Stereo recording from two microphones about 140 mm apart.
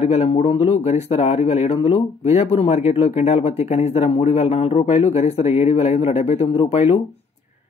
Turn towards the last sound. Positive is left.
turn(degrees=45)  # may be behind; listen again after turning